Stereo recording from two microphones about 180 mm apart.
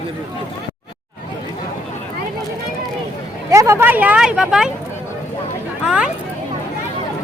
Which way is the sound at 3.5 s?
15° right (ahead or behind).